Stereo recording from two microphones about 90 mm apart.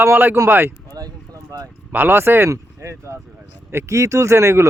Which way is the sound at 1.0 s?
45° right (ahead or behind).